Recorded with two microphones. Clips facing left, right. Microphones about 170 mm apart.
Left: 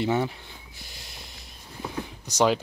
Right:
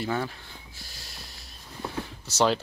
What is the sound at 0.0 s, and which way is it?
Speech, 20° left (ahead or behind).